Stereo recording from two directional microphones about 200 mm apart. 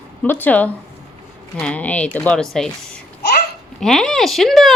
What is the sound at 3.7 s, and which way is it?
Speech, centre (ahead or behind).